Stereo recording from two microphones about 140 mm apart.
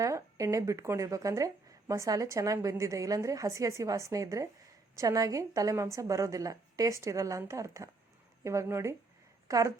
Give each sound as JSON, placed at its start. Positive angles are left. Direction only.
{"t": 0.0, "sound": "speech", "side_deg": -20}